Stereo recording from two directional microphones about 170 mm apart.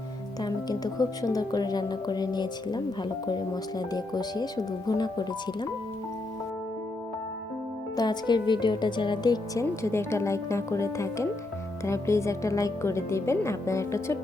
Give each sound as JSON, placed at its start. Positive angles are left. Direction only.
{"t": 0.4, "sound": "speech", "side_deg": 20}
{"t": 7.9, "sound": "speech", "side_deg": 25}